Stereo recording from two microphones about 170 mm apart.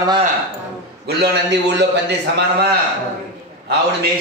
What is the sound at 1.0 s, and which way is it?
A man's voice, 85° right.